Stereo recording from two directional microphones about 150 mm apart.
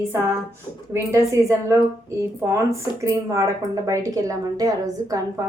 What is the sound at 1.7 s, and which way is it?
Speech, 20° right (ahead or behind).